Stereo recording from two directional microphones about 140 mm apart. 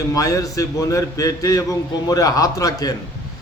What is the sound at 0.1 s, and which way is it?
A man's voice, 25° left (ahead or behind).